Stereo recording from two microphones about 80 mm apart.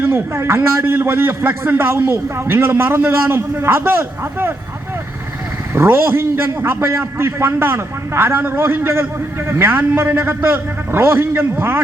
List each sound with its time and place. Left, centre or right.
0.0 s a man's voice: right
5.7 s a man's voice: right